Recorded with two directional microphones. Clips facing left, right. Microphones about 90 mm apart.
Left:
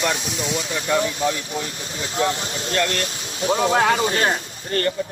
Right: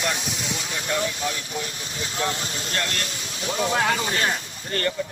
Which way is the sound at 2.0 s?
35° left (ahead or behind).